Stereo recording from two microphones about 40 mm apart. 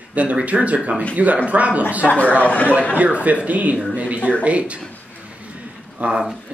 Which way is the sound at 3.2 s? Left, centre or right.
Right.